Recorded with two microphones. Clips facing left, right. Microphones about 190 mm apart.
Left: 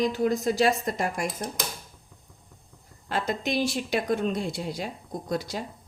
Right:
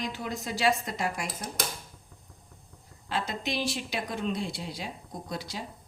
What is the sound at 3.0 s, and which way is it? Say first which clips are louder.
A woman's voice: left 4 dB; 50° left (ahead or behind).